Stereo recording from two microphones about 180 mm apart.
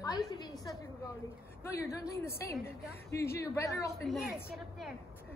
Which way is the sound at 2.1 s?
15° left (ahead or behind).